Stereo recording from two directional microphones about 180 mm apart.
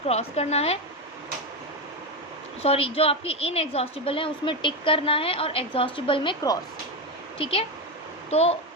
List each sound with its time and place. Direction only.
0.1 s a woman's voice: 35° left (ahead or behind)
2.6 s a woman's voice: 30° left (ahead or behind)